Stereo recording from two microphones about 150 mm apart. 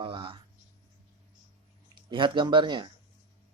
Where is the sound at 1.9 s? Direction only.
35° right (ahead or behind).